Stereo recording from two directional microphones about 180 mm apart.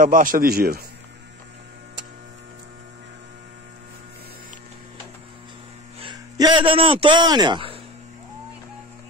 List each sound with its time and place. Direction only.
0.0 s a man's voice: 50° right (ahead or behind)
5.9 s a man's voice: 25° right (ahead or behind)